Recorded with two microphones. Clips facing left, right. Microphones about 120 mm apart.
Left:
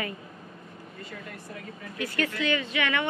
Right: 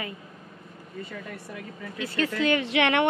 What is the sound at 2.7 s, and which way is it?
Speech, 75° right (ahead or behind).